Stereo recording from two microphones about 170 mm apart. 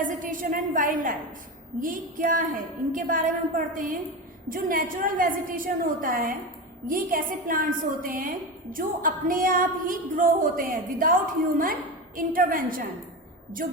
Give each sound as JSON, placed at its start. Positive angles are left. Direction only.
{"t": 0.0, "sound": "a woman's voice", "side_deg": -50}
{"t": 1.8, "sound": "a sound", "side_deg": -55}
{"t": 2.9, "sound": "music", "side_deg": -55}
{"t": 4.4, "sound": "music", "side_deg": -55}